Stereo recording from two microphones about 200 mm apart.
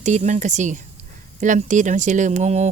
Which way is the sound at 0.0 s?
35° right (ahead or behind).